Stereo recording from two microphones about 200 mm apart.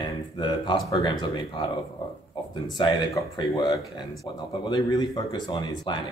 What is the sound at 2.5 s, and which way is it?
Speech, 20° left (ahead or behind).